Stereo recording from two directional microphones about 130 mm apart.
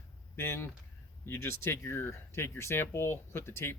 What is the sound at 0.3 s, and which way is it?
Speech, 20° left (ahead or behind).